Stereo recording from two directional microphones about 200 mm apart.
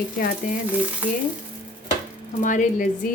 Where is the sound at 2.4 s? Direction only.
40° left (ahead or behind).